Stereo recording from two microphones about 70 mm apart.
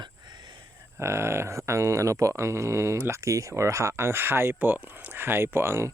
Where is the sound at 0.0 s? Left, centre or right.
Right.